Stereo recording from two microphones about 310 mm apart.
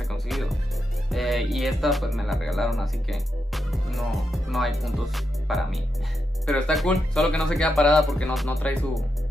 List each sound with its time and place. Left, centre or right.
0.3 s music: centre